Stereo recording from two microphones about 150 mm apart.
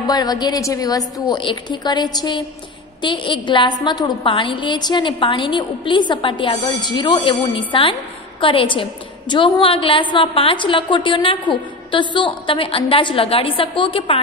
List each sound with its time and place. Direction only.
0.0 s a woman's voice: 25° left (ahead or behind)